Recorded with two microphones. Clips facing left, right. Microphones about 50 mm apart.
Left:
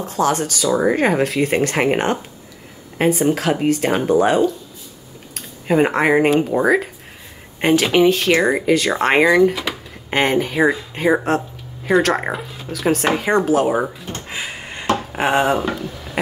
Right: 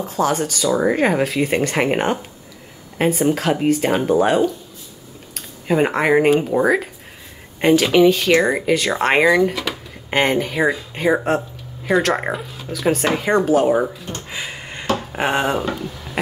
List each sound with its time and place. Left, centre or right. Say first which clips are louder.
0.0 s speech: left 1 dB; centre
14.2 s a sound: left 1 dB; centre
15.1 s speech: left 3 dB; centre